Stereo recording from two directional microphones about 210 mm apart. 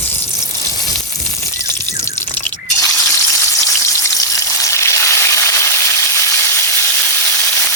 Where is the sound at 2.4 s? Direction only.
15° left (ahead or behind).